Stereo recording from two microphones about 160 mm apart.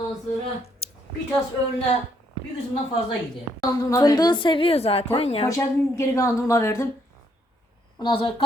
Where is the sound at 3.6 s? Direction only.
20° left (ahead or behind); by 5.4 s 40° left (ahead or behind).